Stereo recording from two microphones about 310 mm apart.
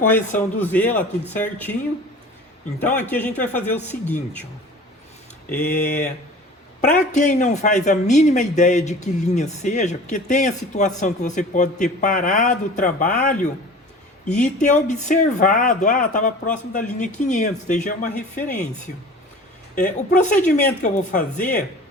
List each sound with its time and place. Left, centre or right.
0.3 s a man's voice: centre
3.1 s a man's voice: centre
5.5 s a man's voice: left
21.3 s a man's voice: centre